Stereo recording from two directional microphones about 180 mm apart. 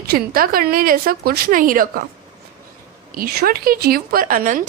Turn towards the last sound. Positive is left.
turn(degrees=-45)  # may be behind; listen again after turning